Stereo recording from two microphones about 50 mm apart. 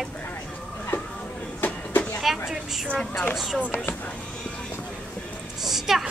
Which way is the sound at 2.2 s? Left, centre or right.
Centre.